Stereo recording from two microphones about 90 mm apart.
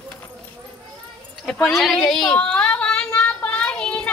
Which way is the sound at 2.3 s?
15° left (ahead or behind).